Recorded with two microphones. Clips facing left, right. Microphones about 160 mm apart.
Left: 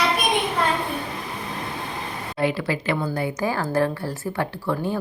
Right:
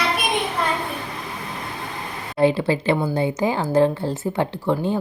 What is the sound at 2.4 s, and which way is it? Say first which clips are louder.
Speech: right 6 dB; 30° right (ahead or behind).